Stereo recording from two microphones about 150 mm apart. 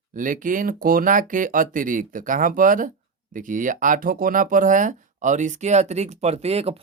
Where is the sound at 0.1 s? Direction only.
60° right (ahead or behind).